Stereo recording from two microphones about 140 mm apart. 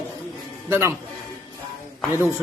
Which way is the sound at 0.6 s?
15° right (ahead or behind).